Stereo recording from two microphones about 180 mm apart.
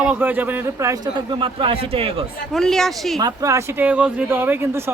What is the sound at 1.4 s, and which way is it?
Speech, 30° right (ahead or behind).